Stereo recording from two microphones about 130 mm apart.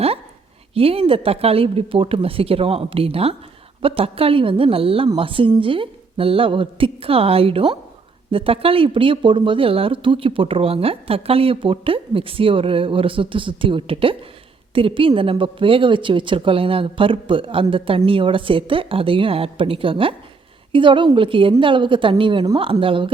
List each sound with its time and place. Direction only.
0.7 s speech: 50° right (ahead or behind)